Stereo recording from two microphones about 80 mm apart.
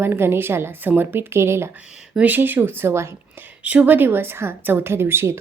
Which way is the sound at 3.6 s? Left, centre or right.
Centre.